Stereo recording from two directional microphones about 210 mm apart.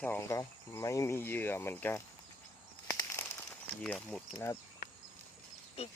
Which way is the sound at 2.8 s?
15° left (ahead or behind).